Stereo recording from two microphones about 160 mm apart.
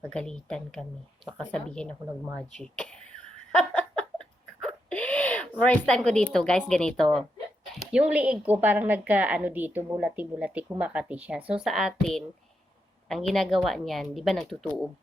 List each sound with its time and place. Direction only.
0.0 s a woman's voice: 5° left (ahead or behind)
2.6 s giggle: 5° left (ahead or behind)
6.0 s a woman's voice: 5° left (ahead or behind)